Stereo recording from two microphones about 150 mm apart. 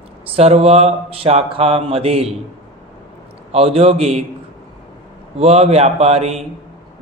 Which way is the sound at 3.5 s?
40° right (ahead or behind).